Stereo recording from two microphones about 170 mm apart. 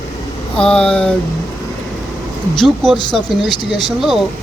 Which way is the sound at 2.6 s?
Centre (ahead or behind).